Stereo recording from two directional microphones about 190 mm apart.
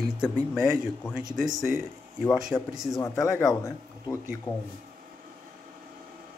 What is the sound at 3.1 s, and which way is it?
Speech, 15° left (ahead or behind).